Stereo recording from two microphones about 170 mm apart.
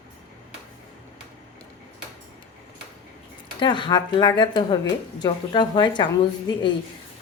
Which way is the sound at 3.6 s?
25° left (ahead or behind).